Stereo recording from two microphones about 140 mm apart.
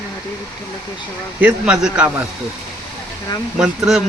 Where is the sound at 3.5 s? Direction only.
5° right (ahead or behind).